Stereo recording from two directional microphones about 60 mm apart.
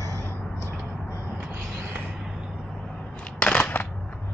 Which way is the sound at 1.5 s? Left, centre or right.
Right.